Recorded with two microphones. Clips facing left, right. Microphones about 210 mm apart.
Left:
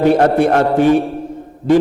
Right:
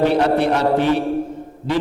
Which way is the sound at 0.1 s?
50° left (ahead or behind).